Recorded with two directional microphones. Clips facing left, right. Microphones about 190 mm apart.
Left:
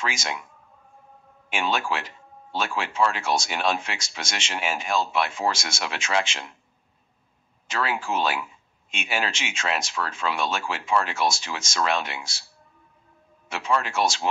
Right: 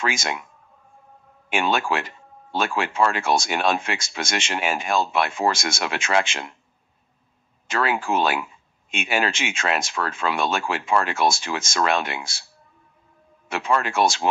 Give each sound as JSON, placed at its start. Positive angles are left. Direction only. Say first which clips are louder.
{"t": 0.0, "sound": "speech", "louder": "right 4 dB", "side_deg": -55}
{"t": 1.5, "sound": "speech", "louder": "right 4 dB", "side_deg": -55}
{"t": 7.6, "sound": "speech", "louder": "right 4 dB", "side_deg": -55}
{"t": 13.5, "sound": "speech", "louder": "right 3 dB", "side_deg": -55}